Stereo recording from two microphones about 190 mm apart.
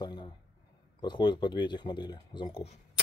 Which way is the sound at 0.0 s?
25° left (ahead or behind).